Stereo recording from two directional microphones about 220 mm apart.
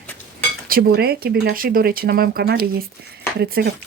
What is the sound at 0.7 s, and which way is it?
Speech, 45° right (ahead or behind).